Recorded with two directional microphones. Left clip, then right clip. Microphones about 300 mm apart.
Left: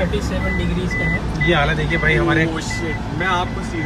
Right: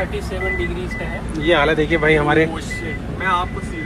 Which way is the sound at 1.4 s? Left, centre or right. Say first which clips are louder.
Right 3 dB; centre.